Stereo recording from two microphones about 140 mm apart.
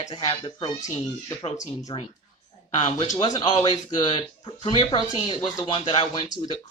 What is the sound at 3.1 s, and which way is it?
Speech, 55° left (ahead or behind).